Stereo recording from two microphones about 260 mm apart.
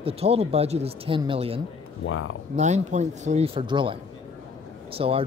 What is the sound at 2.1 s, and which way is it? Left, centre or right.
Speech, left.